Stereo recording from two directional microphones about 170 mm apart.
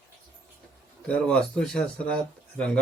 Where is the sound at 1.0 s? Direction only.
5° left (ahead or behind).